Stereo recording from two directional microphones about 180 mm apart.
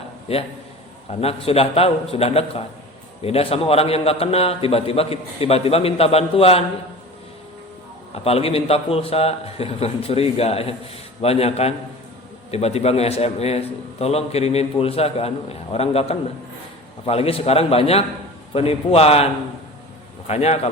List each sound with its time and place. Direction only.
1.2 s a man's voice: 35° left (ahead or behind)
8.1 s a man's voice: 35° left (ahead or behind)